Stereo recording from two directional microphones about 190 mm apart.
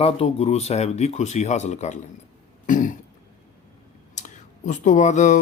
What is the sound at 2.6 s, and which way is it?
Throat clearing, 45° left (ahead or behind).